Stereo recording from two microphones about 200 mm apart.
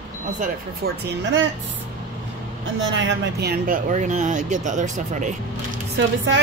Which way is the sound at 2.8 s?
70° right (ahead or behind).